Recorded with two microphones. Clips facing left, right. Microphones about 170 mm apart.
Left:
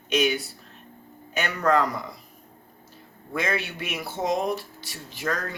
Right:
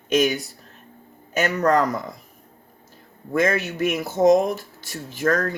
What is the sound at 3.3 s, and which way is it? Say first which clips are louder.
Speech: right 7 dB; 45° right (ahead or behind).